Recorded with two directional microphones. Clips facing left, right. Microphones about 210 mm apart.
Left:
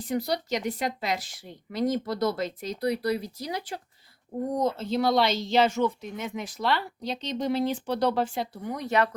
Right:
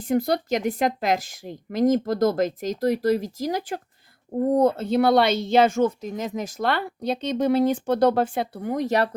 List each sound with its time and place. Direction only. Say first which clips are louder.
0.0 s speech: right 6 dB; 50° right (ahead or behind)
4.5 s speech: right 7 dB; 60° right (ahead or behind); by 9.0 s 40° right (ahead or behind)